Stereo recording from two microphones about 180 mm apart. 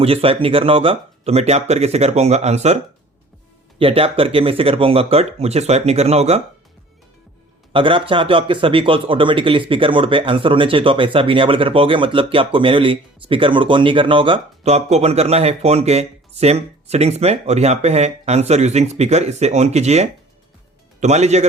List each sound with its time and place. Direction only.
0.0 s speech: 30° right (ahead or behind)
3.8 s speech: 30° right (ahead or behind)
7.7 s speech: 30° right (ahead or behind)